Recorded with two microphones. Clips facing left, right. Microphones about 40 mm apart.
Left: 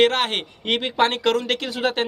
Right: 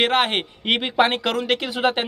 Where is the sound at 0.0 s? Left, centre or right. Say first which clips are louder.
Even; centre.